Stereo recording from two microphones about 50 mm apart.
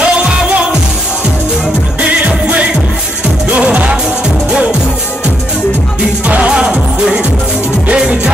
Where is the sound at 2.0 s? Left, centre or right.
Right.